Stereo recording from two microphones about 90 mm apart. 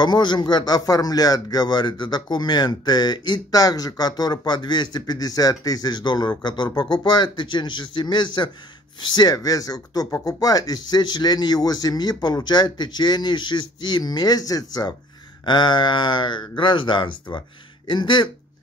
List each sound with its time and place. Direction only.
0.0 s a man's voice: 55° left (ahead or behind)
15.4 s speech: 60° left (ahead or behind)